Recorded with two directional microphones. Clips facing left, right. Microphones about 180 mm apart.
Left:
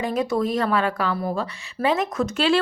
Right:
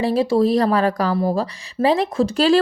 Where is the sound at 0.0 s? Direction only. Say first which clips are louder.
Right 6 dB; 30° right (ahead or behind).